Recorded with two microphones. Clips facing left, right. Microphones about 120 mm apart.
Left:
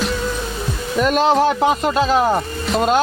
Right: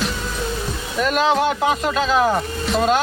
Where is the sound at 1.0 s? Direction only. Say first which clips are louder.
Left 3 dB; 40° left (ahead or behind).